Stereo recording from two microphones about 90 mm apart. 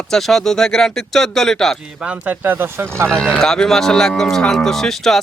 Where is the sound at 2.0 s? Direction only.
15° right (ahead or behind).